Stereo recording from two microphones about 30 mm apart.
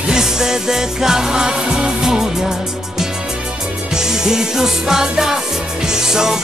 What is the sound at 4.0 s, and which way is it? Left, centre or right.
Music, centre.